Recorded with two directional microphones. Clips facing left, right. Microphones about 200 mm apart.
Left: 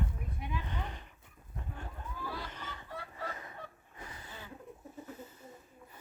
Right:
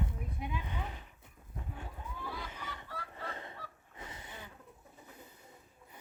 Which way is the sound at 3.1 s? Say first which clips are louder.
Left 1 dB; 30° right (ahead or behind).